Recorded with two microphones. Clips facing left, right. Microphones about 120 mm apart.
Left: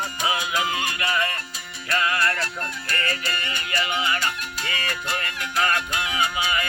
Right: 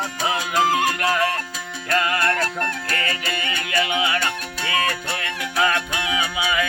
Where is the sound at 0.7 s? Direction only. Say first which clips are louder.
Right 6 dB; 45° right (ahead or behind).